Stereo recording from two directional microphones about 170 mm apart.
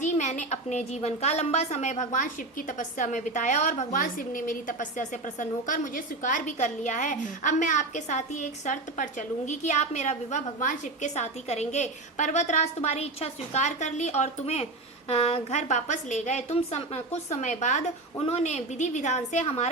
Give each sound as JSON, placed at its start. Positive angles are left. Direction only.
{"t": 0.0, "sound": "a woman's voice", "side_deg": 45}